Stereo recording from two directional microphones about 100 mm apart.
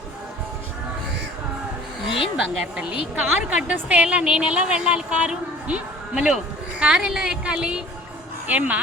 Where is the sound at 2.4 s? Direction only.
5° right (ahead or behind).